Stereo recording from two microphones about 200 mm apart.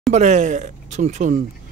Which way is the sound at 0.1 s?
35° right (ahead or behind).